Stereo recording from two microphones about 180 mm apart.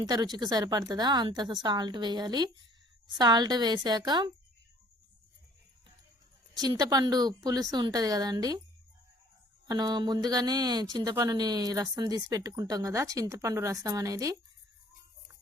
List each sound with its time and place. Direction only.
0.0 s speech: 20° right (ahead or behind)
6.6 s speech: 20° right (ahead or behind)
9.6 s speech: 25° right (ahead or behind)